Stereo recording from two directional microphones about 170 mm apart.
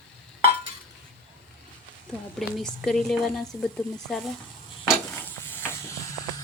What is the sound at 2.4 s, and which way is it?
A woman's voice, centre (ahead or behind).